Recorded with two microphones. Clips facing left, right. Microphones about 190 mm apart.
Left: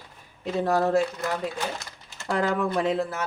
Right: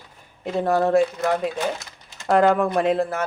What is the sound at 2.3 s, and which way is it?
Speech, 55° right (ahead or behind).